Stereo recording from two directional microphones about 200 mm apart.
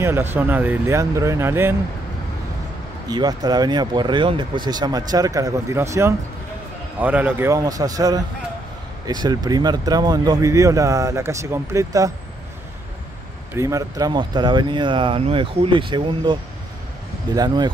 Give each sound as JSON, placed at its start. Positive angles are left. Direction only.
{"t": 0.0, "sound": "speech", "side_deg": -10}
{"t": 3.1, "sound": "speech", "side_deg": -20}
{"t": 13.6, "sound": "speech", "side_deg": -15}